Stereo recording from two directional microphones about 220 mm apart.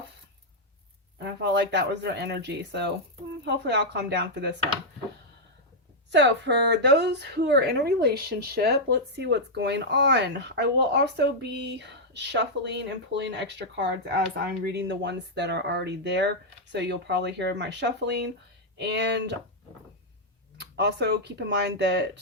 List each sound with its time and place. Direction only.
1.2 s a woman's voice: 50° right (ahead or behind)
6.1 s a woman's voice: 50° right (ahead or behind)
20.6 s a woman's voice: 50° right (ahead or behind)